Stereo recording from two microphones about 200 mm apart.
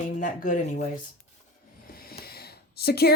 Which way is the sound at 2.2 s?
50° left (ahead or behind).